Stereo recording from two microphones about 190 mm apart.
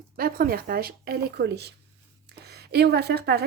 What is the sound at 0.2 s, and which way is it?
A woman's voice, 50° right (ahead or behind).